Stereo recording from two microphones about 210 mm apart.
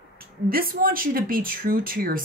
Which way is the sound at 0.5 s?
45° right (ahead or behind).